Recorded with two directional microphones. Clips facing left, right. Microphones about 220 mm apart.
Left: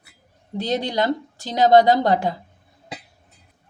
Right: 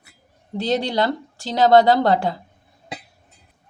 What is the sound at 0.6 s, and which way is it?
Speech, 15° left (ahead or behind).